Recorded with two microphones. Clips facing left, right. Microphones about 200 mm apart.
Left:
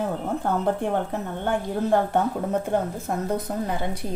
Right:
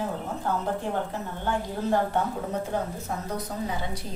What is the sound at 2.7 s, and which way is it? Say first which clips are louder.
Speech: left 5 dB; 55° left (ahead or behind).